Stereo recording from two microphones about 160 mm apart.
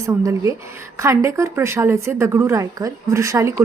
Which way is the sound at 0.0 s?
20° right (ahead or behind).